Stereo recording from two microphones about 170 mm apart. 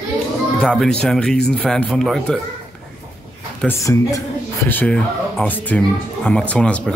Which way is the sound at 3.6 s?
15° left (ahead or behind).